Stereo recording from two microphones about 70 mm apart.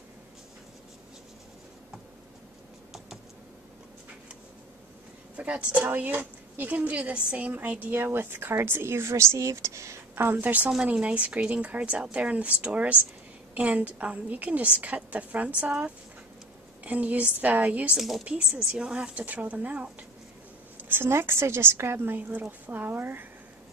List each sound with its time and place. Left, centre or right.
5.4 s a woman's voice: centre
5.9 s speech: right
6.8 s a woman's voice: centre; by 10.2 s right
10.2 s a woman's voice: right
16.8 s a woman's voice: right
17.9 s a woman's voice: centre
18.2 s a woman's voice: centre
20.9 s a woman's voice: right